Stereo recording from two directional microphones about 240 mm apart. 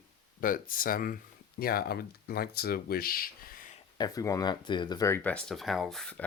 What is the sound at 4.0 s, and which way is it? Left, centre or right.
Speech, centre.